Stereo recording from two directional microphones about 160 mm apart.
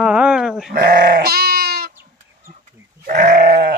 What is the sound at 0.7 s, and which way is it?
Sheep, 70° right (ahead or behind).